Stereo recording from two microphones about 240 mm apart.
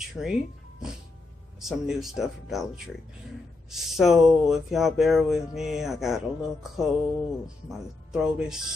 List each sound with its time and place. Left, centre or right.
0.1 s speech: centre
3.7 s speech: centre